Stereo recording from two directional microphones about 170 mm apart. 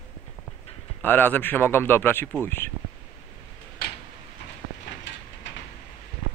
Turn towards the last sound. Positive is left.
turn(degrees=90)